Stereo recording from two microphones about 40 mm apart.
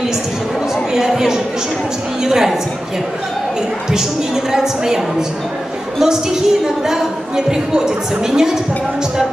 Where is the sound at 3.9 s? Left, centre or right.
Centre.